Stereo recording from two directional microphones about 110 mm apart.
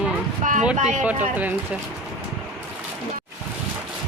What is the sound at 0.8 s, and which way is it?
Speech, 10° right (ahead or behind).